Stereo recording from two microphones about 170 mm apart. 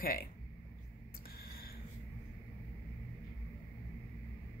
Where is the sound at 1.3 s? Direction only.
60° left (ahead or behind).